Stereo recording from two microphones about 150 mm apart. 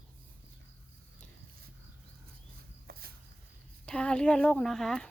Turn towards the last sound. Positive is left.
turn(degrees=5)  # may be behind; listen again after turning